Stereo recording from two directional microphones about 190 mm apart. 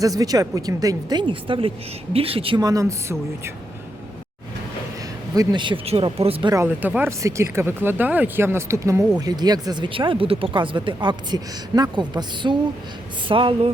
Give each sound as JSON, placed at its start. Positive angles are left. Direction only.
{"t": 0.0, "sound": "speech", "side_deg": -20}
{"t": 5.3, "sound": "speech", "side_deg": -20}
{"t": 6.5, "sound": "speech", "side_deg": -10}